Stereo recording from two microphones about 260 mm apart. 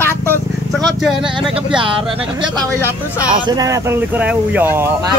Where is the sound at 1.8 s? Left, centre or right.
Centre.